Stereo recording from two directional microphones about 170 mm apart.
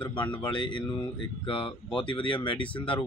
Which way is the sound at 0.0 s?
30° left (ahead or behind).